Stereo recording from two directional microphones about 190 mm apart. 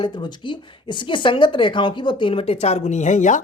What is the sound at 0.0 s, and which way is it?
Speech, 25° left (ahead or behind).